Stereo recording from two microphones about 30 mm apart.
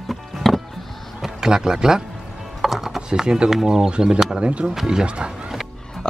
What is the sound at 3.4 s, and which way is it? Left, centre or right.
Speech, centre.